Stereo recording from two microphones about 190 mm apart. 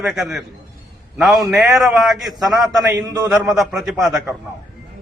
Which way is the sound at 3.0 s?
20° right (ahead or behind).